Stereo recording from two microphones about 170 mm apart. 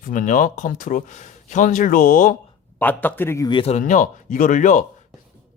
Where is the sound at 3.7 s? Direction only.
45° left (ahead or behind).